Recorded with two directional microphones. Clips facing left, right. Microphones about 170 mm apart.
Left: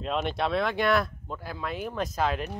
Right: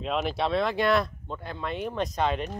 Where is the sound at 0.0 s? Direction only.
Centre (ahead or behind).